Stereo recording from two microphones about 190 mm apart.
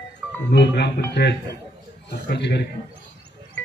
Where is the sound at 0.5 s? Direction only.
60° left (ahead or behind).